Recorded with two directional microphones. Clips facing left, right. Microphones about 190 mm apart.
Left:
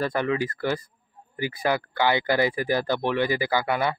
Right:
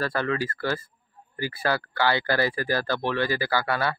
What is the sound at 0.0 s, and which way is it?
Speech, 15° left (ahead or behind).